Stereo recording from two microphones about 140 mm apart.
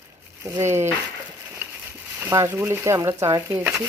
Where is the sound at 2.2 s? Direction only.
20° right (ahead or behind).